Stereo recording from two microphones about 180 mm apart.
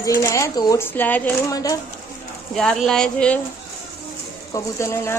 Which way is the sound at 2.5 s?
Centre (ahead or behind).